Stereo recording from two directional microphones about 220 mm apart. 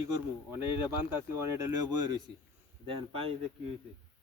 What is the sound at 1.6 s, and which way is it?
Speech, 20° right (ahead or behind).